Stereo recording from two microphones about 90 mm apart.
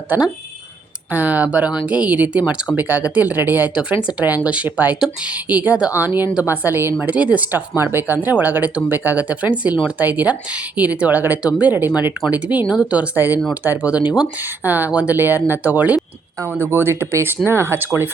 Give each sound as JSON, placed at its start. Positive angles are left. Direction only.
{"t": 1.1, "sound": "speech", "side_deg": -20}